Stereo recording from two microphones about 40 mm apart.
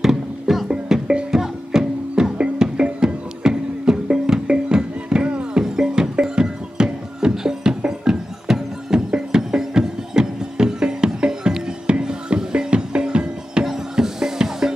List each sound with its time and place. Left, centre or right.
0.0 s music: centre
2.3 s music: right